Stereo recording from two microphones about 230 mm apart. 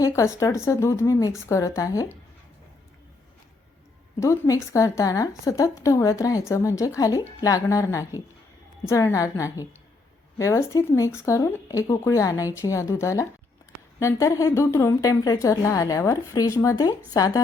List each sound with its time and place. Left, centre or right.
0.0 s a woman's voice: centre
4.2 s a woman's voice: centre